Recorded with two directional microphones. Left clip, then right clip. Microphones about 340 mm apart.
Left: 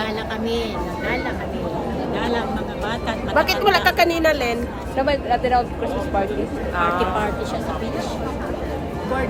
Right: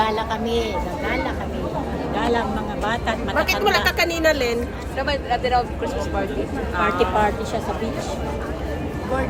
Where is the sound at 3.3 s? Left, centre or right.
Centre.